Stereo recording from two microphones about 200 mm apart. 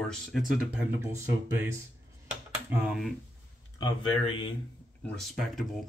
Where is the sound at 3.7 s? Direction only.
20° left (ahead or behind).